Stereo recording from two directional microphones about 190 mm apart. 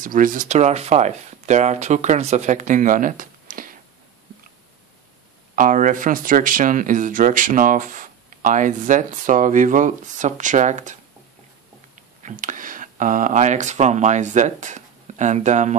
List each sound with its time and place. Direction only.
0.0 s speech: 45° right (ahead or behind)
5.6 s speech: 45° right (ahead or behind)